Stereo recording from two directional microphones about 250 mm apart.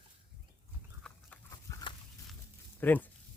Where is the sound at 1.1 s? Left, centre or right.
Centre.